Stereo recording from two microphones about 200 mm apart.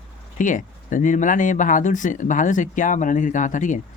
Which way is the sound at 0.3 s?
40° left (ahead or behind).